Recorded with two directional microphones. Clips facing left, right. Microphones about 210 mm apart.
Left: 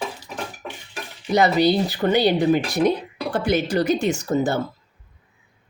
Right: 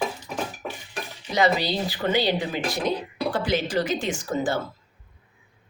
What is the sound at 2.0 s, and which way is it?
Speech, 45° left (ahead or behind).